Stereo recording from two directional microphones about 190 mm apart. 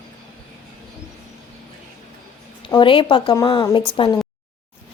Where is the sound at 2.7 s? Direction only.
25° left (ahead or behind).